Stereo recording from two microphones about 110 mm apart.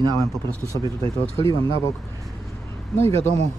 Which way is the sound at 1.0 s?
55° right (ahead or behind).